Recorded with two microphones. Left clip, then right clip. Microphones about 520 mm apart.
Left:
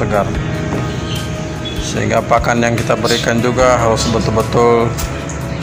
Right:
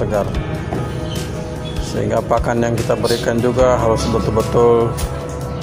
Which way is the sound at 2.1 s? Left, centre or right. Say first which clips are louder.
Left 4 dB; right.